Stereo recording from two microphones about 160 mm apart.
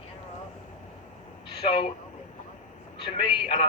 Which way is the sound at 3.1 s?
35° left (ahead or behind).